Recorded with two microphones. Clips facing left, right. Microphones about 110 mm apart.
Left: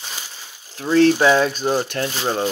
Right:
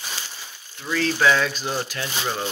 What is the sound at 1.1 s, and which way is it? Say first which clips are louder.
Speech: left 4 dB; 30° left (ahead or behind).